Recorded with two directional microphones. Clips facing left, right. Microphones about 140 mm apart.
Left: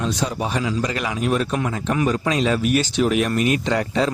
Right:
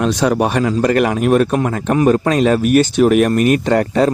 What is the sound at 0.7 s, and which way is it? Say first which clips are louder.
A man's voice: right 10 dB; 55° right (ahead or behind).